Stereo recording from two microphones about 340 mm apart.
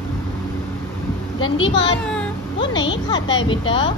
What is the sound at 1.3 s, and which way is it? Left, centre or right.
A child's voice, left.